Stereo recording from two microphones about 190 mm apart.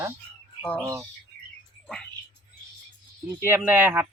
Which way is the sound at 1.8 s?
5° left (ahead or behind).